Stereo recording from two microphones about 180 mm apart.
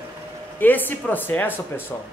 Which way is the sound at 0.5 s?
10° left (ahead or behind).